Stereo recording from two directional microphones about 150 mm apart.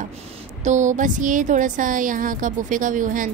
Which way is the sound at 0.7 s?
55° right (ahead or behind).